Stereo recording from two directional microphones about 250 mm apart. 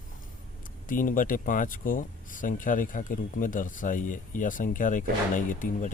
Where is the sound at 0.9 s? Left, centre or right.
Left.